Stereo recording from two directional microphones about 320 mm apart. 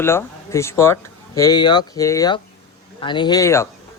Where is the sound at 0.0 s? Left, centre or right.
Centre.